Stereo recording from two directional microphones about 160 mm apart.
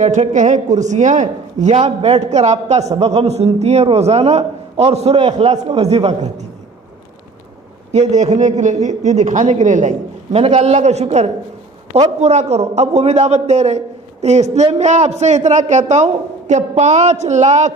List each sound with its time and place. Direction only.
0.0 s a man's voice: 50° right (ahead or behind)
1.8 s a man's voice: 35° right (ahead or behind)
7.9 s a man's voice: 45° right (ahead or behind)